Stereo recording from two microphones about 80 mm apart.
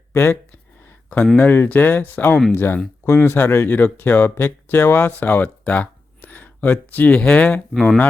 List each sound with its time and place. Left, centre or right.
0.1 s speech: left
1.4 s speech: left
7.7 s speech: centre